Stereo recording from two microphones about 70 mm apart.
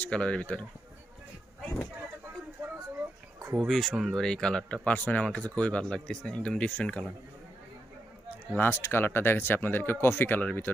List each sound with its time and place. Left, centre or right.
0.0 s speech: centre
3.5 s speech: centre
4.1 s speech: centre
8.5 s speech: left